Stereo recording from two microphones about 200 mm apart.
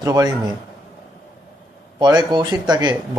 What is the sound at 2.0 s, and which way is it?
Speech, 20° right (ahead or behind).